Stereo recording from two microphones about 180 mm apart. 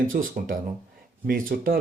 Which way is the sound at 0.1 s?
50° right (ahead or behind).